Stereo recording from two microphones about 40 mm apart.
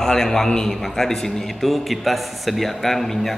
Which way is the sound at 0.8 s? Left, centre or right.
Centre.